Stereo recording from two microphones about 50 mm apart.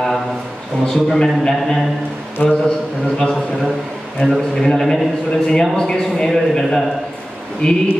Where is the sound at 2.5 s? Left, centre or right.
Centre.